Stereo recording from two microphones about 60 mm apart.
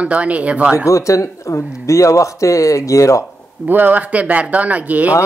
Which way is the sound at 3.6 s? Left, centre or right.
Right.